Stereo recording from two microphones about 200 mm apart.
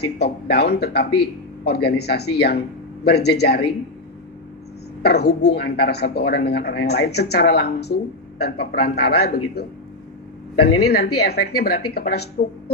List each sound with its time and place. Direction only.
0.0 s a man's voice: 55° left (ahead or behind)
5.0 s a man's voice: 55° left (ahead or behind)
11.2 s a man's voice: 55° left (ahead or behind)